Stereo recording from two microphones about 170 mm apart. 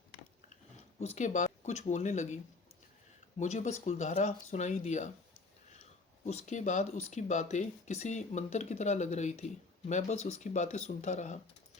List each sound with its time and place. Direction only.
0.5 s speech: 40° left (ahead or behind)
6.2 s speech: 45° left (ahead or behind)